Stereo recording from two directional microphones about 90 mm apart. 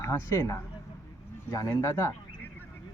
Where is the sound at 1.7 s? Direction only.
35° left (ahead or behind).